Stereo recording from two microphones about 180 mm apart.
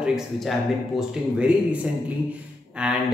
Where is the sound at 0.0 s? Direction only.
Centre (ahead or behind).